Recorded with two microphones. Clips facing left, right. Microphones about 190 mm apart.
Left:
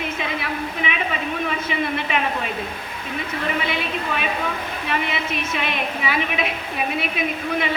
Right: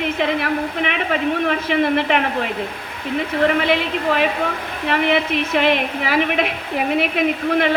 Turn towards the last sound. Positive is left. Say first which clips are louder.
# right 6 dB
turn(degrees=-65)  # may be behind; listen again after turning